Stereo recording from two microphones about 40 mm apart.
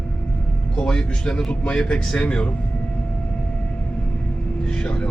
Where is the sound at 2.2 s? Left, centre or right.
Left.